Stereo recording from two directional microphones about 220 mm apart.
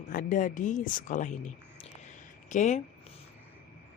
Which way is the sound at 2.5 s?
35° left (ahead or behind).